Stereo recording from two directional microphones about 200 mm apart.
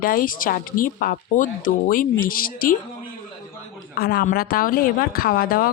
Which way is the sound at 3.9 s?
50° left (ahead or behind).